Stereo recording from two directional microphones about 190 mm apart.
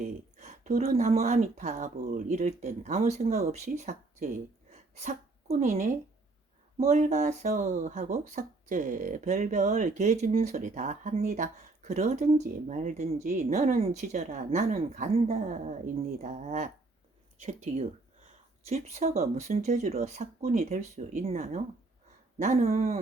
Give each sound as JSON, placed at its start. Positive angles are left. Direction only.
{"t": 0.3, "sound": "speech", "side_deg": -40}
{"t": 4.7, "sound": "sneeze", "side_deg": -35}
{"t": 5.5, "sound": "speech", "side_deg": -50}
{"t": 6.7, "sound": "speech", "side_deg": -35}
{"t": 22.4, "sound": "a sound", "side_deg": -45}